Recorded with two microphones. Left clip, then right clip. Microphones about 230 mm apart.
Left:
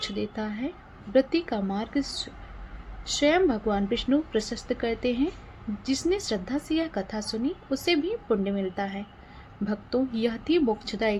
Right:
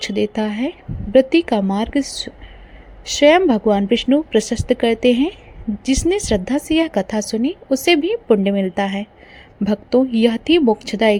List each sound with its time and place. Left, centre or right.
0.0 s a woman's voice: right